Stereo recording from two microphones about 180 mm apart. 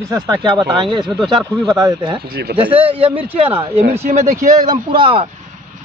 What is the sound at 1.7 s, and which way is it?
A man's voice, 20° right (ahead or behind).